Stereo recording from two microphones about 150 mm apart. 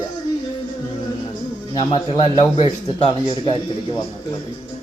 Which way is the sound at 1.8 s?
40° left (ahead or behind).